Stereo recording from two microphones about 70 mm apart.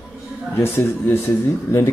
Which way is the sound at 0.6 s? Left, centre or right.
Left.